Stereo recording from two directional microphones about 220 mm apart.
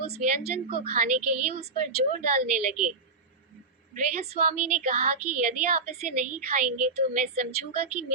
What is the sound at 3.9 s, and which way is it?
Speech, 30° right (ahead or behind).